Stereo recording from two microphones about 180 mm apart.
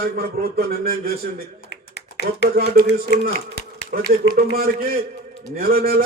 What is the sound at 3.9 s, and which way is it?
A man's voice, 50° right (ahead or behind).